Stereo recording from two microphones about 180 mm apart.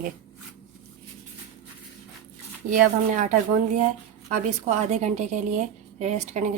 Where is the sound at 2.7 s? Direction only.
45° right (ahead or behind).